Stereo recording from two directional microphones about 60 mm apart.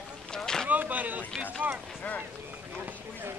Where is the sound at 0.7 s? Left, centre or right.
Right.